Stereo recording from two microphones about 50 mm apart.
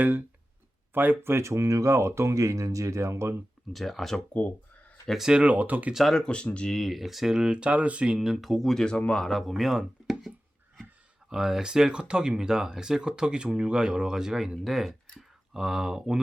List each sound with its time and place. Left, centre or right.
0.0 s speech: right
3.7 s speech: centre
5.3 s speech: right
5.9 s speech: centre
6.1 s speech: centre
6.7 s speech: centre